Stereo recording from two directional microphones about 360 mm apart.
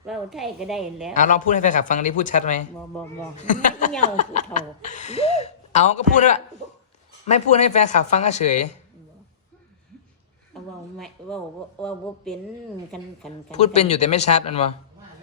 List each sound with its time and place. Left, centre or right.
0.0 s a woman's voice: centre
1.1 s speech: left
10.9 s a woman's voice: centre
13.5 s speech: centre